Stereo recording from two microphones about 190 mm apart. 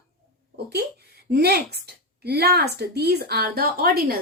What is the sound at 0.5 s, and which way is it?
A woman's voice, 55° right (ahead or behind).